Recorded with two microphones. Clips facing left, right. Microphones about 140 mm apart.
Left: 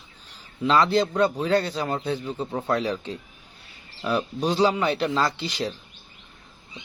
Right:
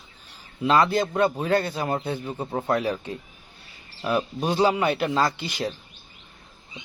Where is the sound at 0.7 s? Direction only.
50° right (ahead or behind).